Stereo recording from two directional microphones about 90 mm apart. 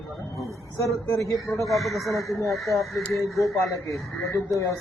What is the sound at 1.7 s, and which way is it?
Speech, centre (ahead or behind).